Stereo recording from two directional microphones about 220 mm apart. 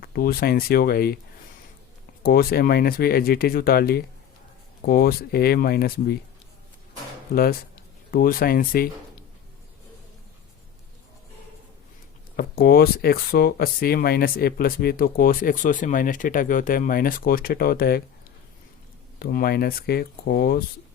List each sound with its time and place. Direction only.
0.0 s speech: 45° left (ahead or behind)
2.2 s speech: 45° left (ahead or behind)
7.3 s speech: 40° left (ahead or behind)
12.4 s speech: 45° left (ahead or behind)
19.2 s speech: 45° left (ahead or behind)